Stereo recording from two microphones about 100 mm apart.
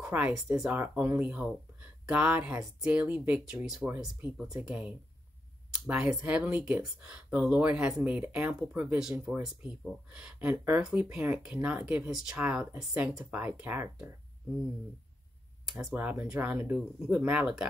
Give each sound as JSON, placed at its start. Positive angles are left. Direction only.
{"t": 0.0, "sound": "speech", "side_deg": -15}
{"t": 3.6, "sound": "speech", "side_deg": -5}
{"t": 5.7, "sound": "a sound", "side_deg": -5}
{"t": 6.2, "sound": "speech", "side_deg": -15}
{"t": 10.8, "sound": "speech", "side_deg": -10}
{"t": 15.9, "sound": "speech", "side_deg": -15}
{"t": 16.7, "sound": "speech", "side_deg": -5}